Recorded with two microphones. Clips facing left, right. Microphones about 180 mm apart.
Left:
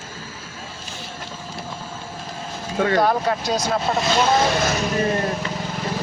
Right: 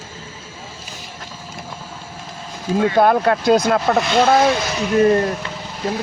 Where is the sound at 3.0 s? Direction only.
60° right (ahead or behind).